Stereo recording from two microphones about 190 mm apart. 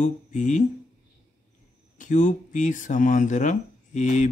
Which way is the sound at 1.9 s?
40° left (ahead or behind).